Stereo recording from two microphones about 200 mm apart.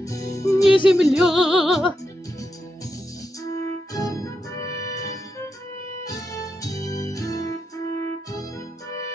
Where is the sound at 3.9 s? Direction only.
15° left (ahead or behind).